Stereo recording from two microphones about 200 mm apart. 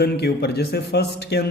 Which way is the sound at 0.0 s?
55° left (ahead or behind).